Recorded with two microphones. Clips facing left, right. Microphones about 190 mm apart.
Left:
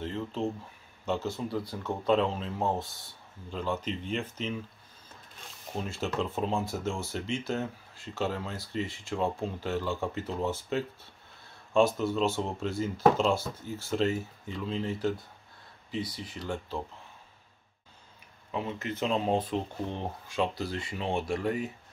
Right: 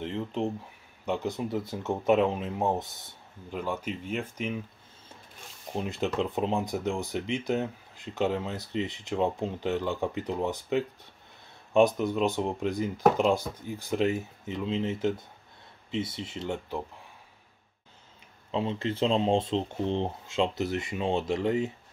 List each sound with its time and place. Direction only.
0.0 s a sound: 20° right (ahead or behind)
1.0 s speech: 15° right (ahead or behind)
5.7 s speech: 20° right (ahead or behind)
18.5 s speech: 25° right (ahead or behind)